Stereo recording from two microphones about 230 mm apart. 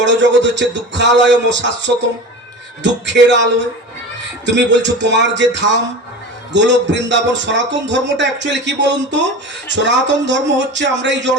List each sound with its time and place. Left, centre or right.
0.0 s a man's voice: right